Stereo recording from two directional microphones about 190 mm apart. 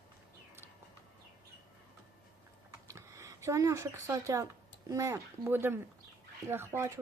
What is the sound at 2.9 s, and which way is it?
Speech, 15° right (ahead or behind).